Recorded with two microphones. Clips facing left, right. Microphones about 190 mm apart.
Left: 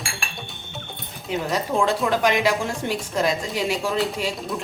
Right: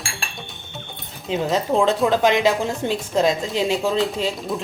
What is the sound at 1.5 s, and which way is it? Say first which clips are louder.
A woman's voice: right 3 dB; 20° right (ahead or behind).